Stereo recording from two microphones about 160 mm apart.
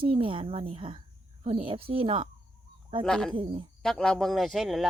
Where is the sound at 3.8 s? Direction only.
5° left (ahead or behind).